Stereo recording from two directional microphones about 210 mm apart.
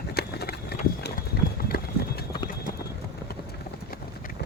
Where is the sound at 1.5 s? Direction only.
45° left (ahead or behind).